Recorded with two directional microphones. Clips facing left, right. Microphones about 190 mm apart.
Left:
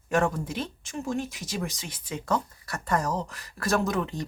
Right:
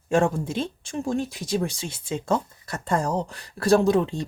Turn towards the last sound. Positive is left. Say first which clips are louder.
# right 8 dB
turn(degrees=-30)  # may be behind; listen again after turning